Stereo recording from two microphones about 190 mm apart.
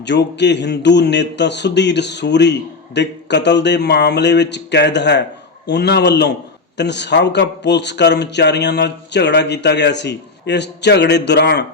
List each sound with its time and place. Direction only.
0.0 s speech: 65° left (ahead or behind)